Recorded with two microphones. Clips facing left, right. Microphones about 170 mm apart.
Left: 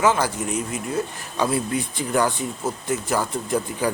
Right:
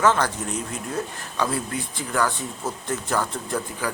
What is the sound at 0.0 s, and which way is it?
Speech, 10° left (ahead or behind).